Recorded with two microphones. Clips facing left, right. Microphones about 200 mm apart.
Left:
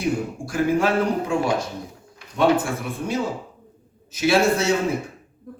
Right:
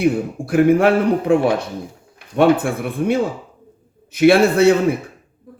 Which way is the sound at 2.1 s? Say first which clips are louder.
Right 5 dB; 60° right (ahead or behind).